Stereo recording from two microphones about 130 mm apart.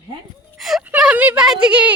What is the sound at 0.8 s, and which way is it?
Speech, 10° right (ahead or behind).